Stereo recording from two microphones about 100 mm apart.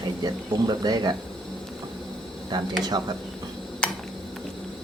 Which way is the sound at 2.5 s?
45° right (ahead or behind).